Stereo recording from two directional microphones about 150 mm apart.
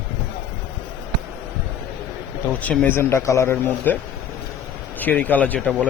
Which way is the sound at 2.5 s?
10° left (ahead or behind).